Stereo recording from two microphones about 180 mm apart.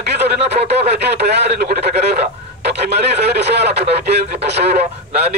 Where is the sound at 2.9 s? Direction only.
65° right (ahead or behind).